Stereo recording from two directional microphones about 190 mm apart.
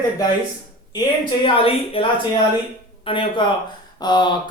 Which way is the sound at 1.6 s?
30° left (ahead or behind).